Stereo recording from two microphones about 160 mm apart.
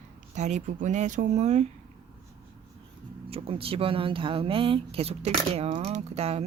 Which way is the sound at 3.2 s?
35° right (ahead or behind).